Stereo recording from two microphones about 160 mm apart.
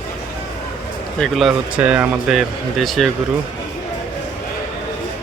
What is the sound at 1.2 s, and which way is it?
Speech, centre (ahead or behind).